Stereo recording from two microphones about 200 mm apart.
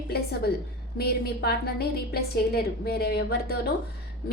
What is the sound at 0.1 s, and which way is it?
Speech, 55° left (ahead or behind).